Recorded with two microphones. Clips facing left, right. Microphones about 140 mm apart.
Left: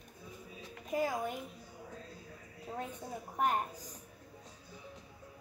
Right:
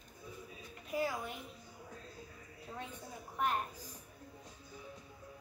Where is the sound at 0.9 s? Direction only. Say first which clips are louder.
Left 3 dB; 45° left (ahead or behind).